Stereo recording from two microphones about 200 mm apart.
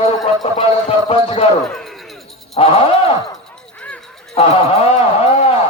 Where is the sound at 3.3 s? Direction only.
5° left (ahead or behind).